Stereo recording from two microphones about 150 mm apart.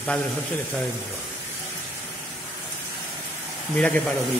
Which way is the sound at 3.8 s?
10° left (ahead or behind).